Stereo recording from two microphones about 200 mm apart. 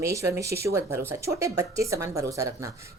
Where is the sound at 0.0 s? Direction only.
15° right (ahead or behind).